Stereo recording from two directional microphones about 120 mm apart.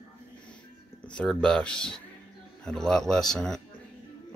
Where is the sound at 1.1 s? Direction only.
5° left (ahead or behind).